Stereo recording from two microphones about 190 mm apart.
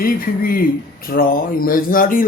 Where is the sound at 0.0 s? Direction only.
50° left (ahead or behind).